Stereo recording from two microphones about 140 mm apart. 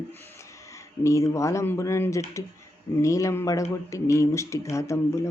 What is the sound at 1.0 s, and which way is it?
Speech, 20° left (ahead or behind).